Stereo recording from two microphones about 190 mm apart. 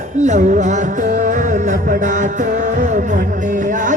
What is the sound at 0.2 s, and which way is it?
Music, 40° right (ahead or behind).